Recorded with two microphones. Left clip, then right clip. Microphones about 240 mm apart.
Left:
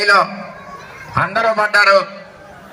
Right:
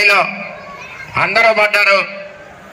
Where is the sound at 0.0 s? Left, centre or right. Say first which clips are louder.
Right 1 dB; right.